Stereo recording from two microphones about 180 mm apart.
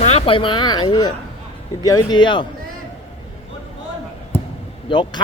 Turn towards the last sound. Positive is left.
turn(degrees=25)  # may be behind; listen again after turning